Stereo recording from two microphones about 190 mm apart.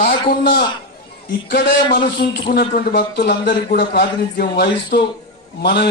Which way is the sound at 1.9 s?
55° left (ahead or behind).